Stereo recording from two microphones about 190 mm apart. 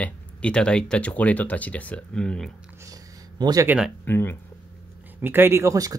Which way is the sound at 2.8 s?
20° right (ahead or behind).